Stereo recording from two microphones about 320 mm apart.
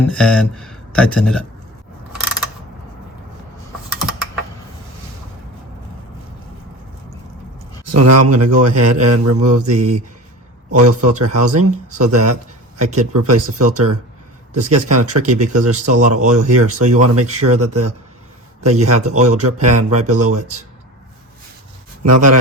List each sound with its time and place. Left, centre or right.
0.1 s speech: centre
7.9 s speech: right
22.0 s speech: right